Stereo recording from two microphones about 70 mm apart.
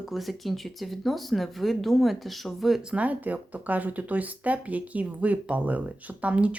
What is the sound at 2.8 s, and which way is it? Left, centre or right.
Speech, centre.